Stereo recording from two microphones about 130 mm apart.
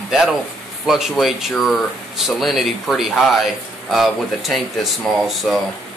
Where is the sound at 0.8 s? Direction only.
5° right (ahead or behind).